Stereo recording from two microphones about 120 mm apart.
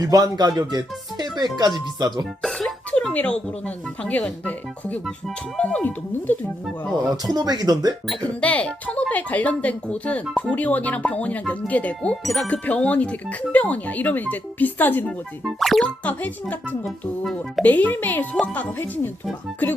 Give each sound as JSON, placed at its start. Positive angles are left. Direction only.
{"t": 0.0, "sound": "speech", "side_deg": -30}
{"t": 2.4, "sound": "music", "side_deg": 5}
{"t": 4.0, "sound": "speech", "side_deg": 10}
{"t": 7.3, "sound": "speech", "side_deg": -35}
{"t": 8.0, "sound": "speech", "side_deg": 10}
{"t": 15.4, "sound": "music", "side_deg": 0}
{"t": 16.0, "sound": "speech", "side_deg": 15}
{"t": 17.6, "sound": "speech", "side_deg": 15}